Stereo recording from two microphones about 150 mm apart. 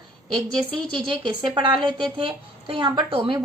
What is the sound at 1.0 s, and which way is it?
A woman's voice, 30° right (ahead or behind).